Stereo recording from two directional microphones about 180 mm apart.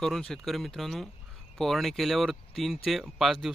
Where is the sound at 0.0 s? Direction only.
Centre (ahead or behind).